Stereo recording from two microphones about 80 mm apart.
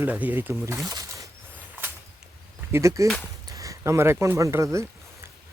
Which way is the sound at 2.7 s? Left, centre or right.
Right.